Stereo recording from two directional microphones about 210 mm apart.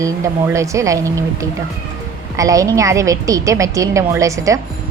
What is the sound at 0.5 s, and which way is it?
A woman's voice, 15° right (ahead or behind).